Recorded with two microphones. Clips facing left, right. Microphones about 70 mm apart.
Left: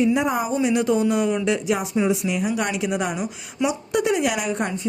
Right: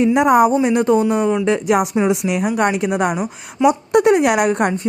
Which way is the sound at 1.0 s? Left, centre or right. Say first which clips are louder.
Right 4 dB; right.